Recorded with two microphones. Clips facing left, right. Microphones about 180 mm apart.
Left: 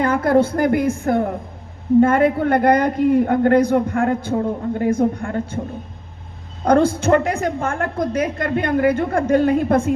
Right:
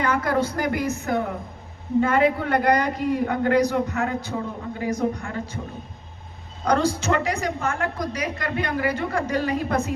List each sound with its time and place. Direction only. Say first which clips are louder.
0.0 s a man's voice: left 7 dB; 50° left (ahead or behind)
6.7 s a man's voice: left 7 dB; 55° left (ahead or behind)